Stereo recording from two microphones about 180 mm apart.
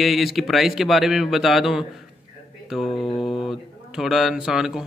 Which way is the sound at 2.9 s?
30° left (ahead or behind).